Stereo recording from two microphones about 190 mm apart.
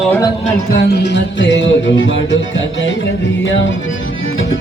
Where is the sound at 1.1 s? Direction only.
70° left (ahead or behind).